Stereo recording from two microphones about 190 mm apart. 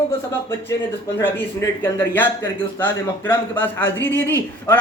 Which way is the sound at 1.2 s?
15° left (ahead or behind).